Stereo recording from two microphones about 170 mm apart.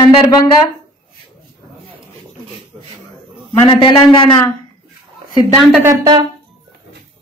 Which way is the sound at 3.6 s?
30° left (ahead or behind).